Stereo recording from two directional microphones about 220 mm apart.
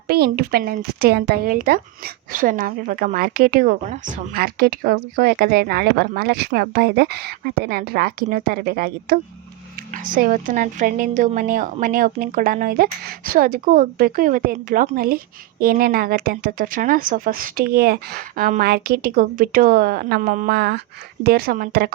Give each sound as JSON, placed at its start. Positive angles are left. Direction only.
{"t": 0.1, "sound": "a woman's voice", "side_deg": -45}